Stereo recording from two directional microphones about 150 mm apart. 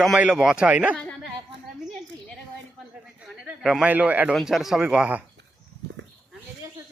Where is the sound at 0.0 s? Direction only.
5° right (ahead or behind).